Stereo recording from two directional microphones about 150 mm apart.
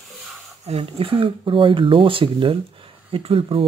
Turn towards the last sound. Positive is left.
turn(degrees=-35)  # may be behind; listen again after turning